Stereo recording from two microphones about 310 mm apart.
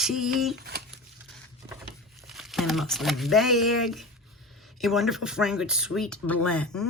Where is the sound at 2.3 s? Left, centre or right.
Centre.